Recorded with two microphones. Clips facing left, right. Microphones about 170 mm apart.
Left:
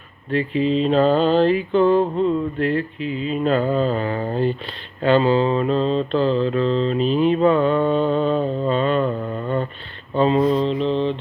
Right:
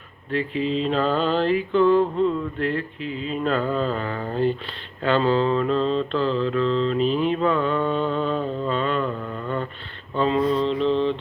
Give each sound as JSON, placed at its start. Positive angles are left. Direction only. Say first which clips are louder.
{"t": 0.3, "sound": "mantra", "louder": "left 4 dB", "side_deg": 20}